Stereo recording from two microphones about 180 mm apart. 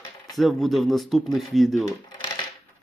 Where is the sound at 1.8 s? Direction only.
25° left (ahead or behind).